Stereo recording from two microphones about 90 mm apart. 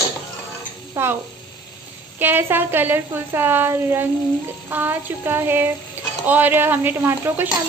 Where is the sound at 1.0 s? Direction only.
30° right (ahead or behind).